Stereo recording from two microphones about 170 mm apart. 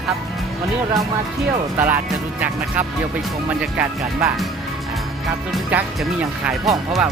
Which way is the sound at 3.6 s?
10° right (ahead or behind).